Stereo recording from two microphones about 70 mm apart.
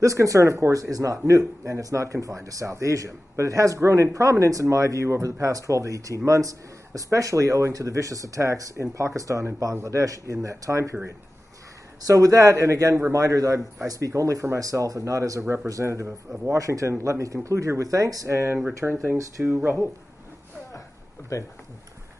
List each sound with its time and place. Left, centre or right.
0.0 s a man's voice: right
12.0 s a man's voice: right
15.4 s speech: right
15.7 s a man's voice: right
18.8 s speech: centre
19.4 s speech: right
21.3 s speech: left